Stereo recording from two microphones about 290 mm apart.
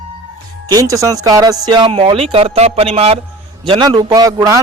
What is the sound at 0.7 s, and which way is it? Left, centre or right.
Speech, centre.